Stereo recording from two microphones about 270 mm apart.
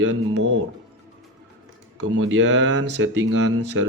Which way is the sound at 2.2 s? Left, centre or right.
Right.